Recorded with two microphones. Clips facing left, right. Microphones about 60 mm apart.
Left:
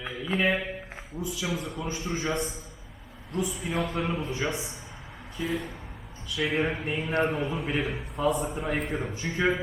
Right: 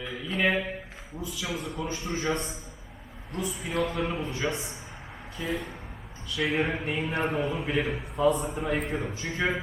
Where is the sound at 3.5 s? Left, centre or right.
Centre.